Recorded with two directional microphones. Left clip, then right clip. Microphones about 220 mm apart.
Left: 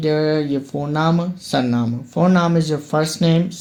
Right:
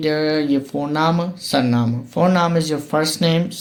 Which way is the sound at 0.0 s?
30° left (ahead or behind).